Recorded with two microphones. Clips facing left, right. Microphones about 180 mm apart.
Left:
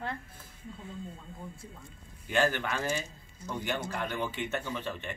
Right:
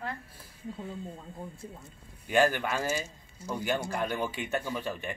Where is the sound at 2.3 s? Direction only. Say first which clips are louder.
Right 3 dB; 10° right (ahead or behind).